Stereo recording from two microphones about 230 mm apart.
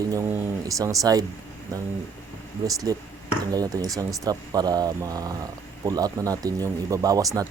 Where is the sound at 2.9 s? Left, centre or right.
Centre.